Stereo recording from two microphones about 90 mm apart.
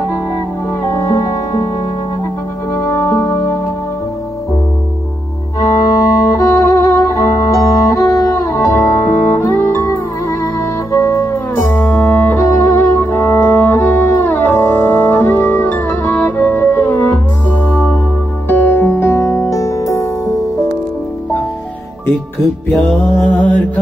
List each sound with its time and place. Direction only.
2.7 s music: 25° left (ahead or behind)
5.8 s music: 40° left (ahead or behind)
18.5 s music: 25° left (ahead or behind)
22.7 s music: 25° left (ahead or behind)
23.2 s mantra: 15° left (ahead or behind)